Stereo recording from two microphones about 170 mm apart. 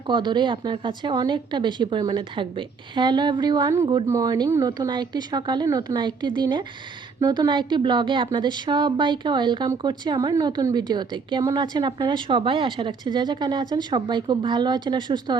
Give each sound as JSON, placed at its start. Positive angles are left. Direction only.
{"t": 0.1, "sound": "a woman's voice", "side_deg": -25}